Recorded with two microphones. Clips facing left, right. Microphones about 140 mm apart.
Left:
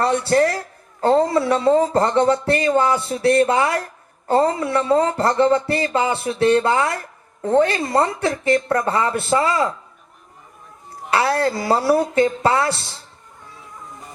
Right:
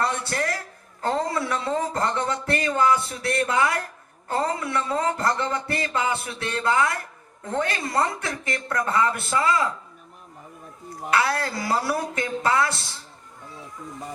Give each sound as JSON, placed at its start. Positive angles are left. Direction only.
{"t": 0.0, "sound": "speech", "side_deg": 35}
{"t": 11.1, "sound": "speech", "side_deg": 35}